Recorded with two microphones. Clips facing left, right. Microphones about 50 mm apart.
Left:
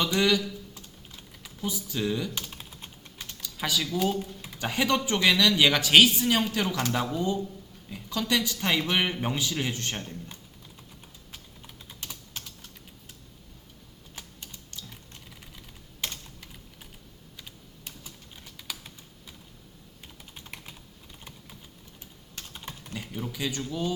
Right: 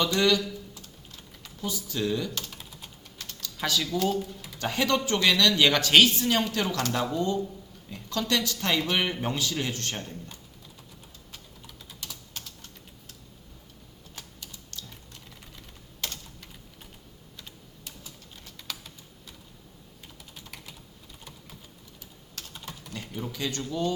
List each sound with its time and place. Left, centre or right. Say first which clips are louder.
0.0 s a man's voice: right 1 dB; centre
1.1 s typing: left 1 dB; centre
2.5 s typing: left 1 dB; left
3.2 s typing: right 1 dB; centre
4.6 s a man's voice: even; centre
11.6 s typing: even; left
14.2 s typing: even; centre
18.4 s typing: even; centre
22.4 s typing: even; centre
23.2 s a sound: even; centre